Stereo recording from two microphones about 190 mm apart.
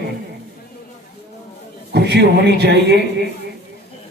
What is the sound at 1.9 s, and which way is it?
A man's voice, 60° right (ahead or behind).